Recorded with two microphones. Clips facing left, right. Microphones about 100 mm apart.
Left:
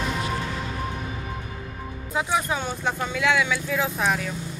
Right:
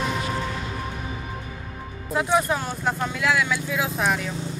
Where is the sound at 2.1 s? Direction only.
Centre (ahead or behind).